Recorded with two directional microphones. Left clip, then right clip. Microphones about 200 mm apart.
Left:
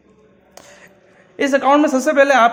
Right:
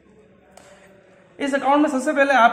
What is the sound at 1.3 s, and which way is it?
Speech, 45° left (ahead or behind).